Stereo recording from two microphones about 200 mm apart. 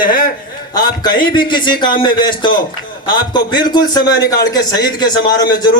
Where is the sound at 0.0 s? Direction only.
45° left (ahead or behind).